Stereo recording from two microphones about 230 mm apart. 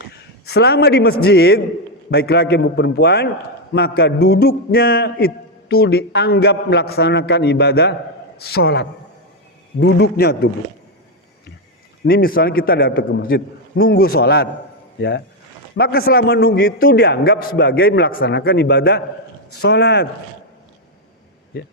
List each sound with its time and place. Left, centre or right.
0.1 s a man's voice: left
12.0 s a man's voice: left
21.5 s a man's voice: left